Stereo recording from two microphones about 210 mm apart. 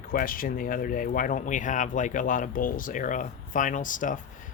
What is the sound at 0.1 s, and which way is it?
Speech, 40° left (ahead or behind).